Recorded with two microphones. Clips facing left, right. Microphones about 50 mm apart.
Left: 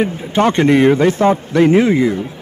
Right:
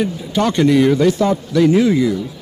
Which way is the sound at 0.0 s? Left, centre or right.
Left.